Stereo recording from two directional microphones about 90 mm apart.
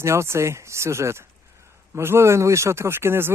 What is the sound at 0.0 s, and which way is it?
A man's voice, 30° right (ahead or behind).